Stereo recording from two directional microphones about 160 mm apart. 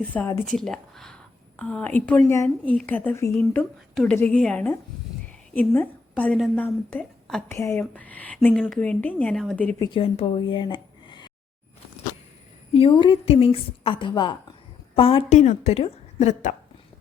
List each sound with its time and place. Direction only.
0.1 s a woman's voice: 10° left (ahead or behind)
7.4 s a woman's voice: 15° left (ahead or behind)
9.7 s speech: 25° left (ahead or behind)
10.0 s speech: 35° left (ahead or behind)
12.7 s a woman's voice: 35° left (ahead or behind)
15.4 s a woman's voice: 45° left (ahead or behind)